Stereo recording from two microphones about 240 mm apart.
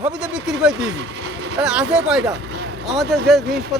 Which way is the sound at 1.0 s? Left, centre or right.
Right.